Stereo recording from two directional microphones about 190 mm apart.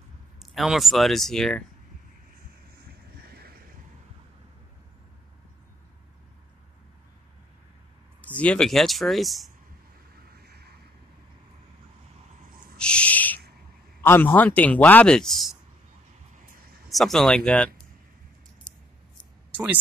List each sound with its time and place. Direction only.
0.4 s speech: centre (ahead or behind)
3.2 s vehicle: 55° right (ahead or behind)
8.2 s speech: 5° left (ahead or behind)
10.3 s vehicle: 60° right (ahead or behind)
12.7 s owl: 5° left (ahead or behind)
14.0 s speech: 10° left (ahead or behind)
16.4 s a sound: 50° right (ahead or behind)
16.9 s speech: centre (ahead or behind)
19.5 s speech: 10° right (ahead or behind)